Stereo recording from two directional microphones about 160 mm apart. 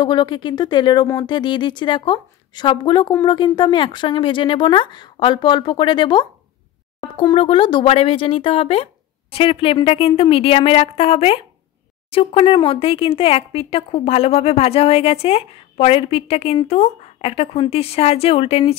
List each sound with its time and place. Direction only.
0.0 s speech: 30° left (ahead or behind)